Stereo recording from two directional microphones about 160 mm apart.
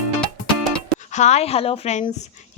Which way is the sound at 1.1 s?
45° left (ahead or behind).